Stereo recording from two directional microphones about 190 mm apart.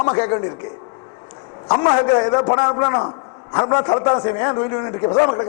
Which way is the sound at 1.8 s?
25° left (ahead or behind).